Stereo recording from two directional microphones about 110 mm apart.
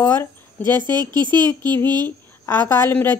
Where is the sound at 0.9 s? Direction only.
40° right (ahead or behind).